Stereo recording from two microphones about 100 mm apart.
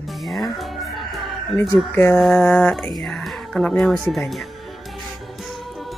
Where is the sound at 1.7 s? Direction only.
20° left (ahead or behind).